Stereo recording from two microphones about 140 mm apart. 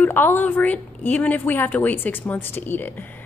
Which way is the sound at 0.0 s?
15° left (ahead or behind).